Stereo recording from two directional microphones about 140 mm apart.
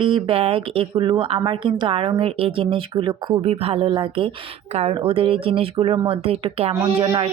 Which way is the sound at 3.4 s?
45° right (ahead or behind).